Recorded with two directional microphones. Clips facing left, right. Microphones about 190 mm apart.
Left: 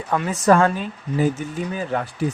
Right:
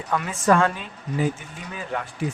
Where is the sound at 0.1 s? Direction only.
35° left (ahead or behind).